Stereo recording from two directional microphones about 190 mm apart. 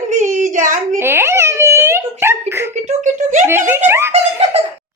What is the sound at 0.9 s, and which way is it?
A child's voice, 15° right (ahead or behind).